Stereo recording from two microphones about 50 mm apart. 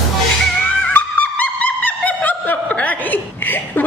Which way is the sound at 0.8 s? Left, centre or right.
Left.